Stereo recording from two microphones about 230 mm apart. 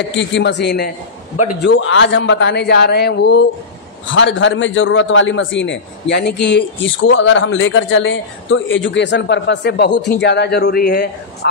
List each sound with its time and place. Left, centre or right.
0.1 s a man's voice: left